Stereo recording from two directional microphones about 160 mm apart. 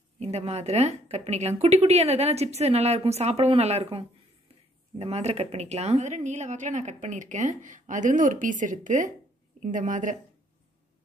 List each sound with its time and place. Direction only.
0.2 s a woman's voice: 40° right (ahead or behind)